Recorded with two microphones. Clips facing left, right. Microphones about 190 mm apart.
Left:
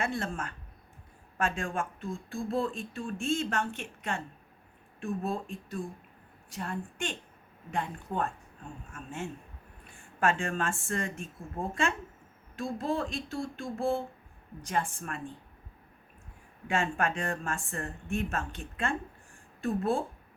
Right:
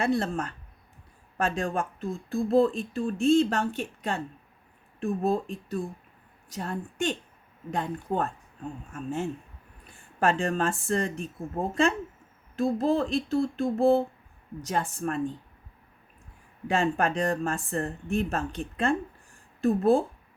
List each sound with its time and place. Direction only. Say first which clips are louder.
0.0 s speech: right 7 dB; 35° right (ahead or behind)
16.6 s speech: right 5 dB; 35° right (ahead or behind)